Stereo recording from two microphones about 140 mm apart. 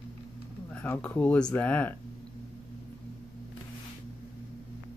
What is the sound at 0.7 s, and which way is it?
Speech, 10° left (ahead or behind).